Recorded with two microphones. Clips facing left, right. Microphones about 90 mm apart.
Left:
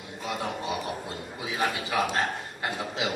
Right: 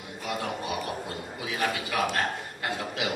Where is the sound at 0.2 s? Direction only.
25° left (ahead or behind).